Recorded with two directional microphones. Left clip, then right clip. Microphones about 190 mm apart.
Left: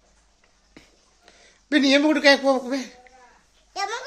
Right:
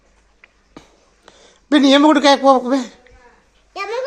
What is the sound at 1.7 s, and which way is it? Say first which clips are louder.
Speech: right 7 dB; 10° right (ahead or behind).